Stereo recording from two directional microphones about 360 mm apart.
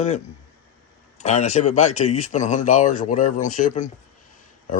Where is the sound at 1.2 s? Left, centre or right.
Centre.